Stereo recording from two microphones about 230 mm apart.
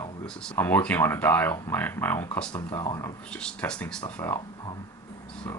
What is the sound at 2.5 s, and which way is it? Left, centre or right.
Speech, centre.